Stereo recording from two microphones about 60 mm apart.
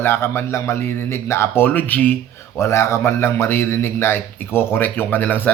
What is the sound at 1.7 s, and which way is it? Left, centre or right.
Speech, left.